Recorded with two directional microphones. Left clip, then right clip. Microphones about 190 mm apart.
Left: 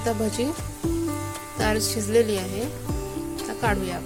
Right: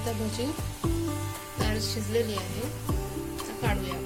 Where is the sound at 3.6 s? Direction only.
40° left (ahead or behind).